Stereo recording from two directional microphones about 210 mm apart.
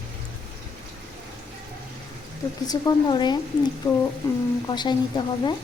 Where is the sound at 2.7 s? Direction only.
20° left (ahead or behind).